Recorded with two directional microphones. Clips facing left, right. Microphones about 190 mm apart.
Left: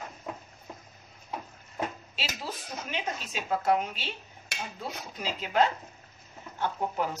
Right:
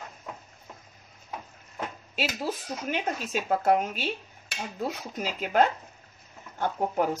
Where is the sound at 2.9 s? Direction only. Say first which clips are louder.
Right 6 dB; 50° right (ahead or behind).